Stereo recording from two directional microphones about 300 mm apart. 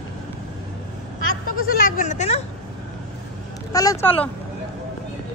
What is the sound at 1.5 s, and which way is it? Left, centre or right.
Speech, left.